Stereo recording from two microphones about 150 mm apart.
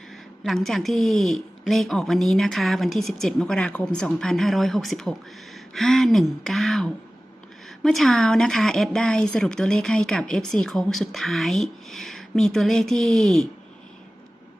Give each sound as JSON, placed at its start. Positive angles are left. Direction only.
{"t": 0.4, "sound": "speech", "side_deg": 0}